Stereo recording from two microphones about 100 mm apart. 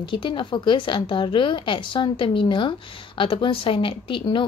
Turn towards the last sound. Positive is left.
turn(degrees=60)  # may be behind; listen again after turning